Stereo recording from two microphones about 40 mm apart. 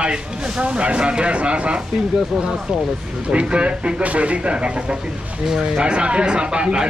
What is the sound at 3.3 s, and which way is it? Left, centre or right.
Speech, right.